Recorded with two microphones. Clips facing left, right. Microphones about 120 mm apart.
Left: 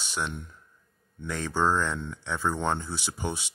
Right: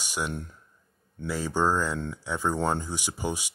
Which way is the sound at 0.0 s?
10° right (ahead or behind).